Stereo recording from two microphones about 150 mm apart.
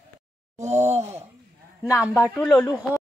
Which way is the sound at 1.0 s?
15° right (ahead or behind).